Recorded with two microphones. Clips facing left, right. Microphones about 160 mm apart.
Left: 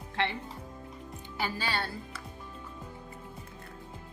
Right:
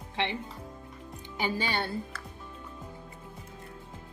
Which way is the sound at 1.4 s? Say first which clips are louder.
Right 3 dB; 20° right (ahead or behind).